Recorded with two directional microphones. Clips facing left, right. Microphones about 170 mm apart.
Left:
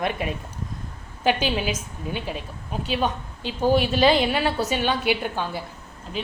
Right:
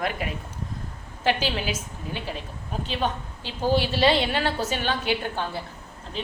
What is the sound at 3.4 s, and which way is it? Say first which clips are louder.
A woman's voice: left 3 dB; 15° left (ahead or behind).